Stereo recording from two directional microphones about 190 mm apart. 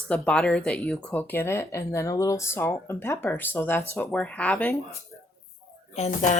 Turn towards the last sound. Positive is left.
turn(degrees=40)  # may be behind; listen again after turning